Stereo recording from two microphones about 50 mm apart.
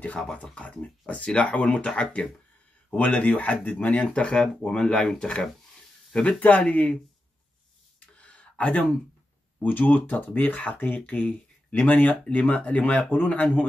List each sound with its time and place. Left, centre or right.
0.4 s speech: left
6.2 s speech: left
8.2 s a sound: left
9.6 s speech: left